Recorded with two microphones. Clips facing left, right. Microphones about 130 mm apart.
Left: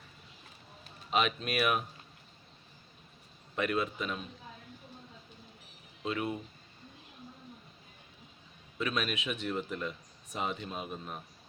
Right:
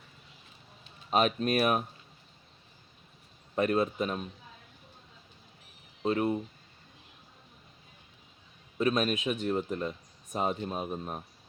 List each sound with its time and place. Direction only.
1.1 s speech: 40° right (ahead or behind)
3.5 s speech: 35° right (ahead or behind)
6.0 s speech: 35° right (ahead or behind)
8.8 s speech: 40° right (ahead or behind)